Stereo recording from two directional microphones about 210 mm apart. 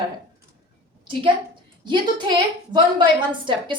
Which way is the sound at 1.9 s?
20° right (ahead or behind).